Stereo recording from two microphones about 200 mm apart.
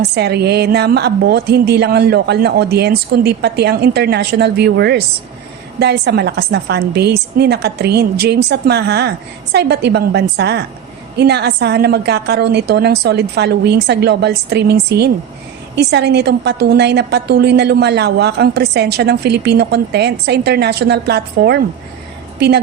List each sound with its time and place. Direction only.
0.1 s a woman's voice: 55° right (ahead or behind)